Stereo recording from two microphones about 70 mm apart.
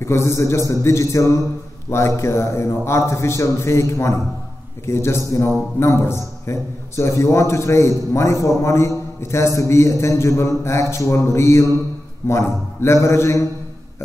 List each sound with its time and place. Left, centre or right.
0.0 s a man's voice: left